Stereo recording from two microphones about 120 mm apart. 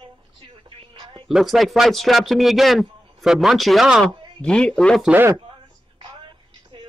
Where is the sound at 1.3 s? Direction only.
Centre (ahead or behind).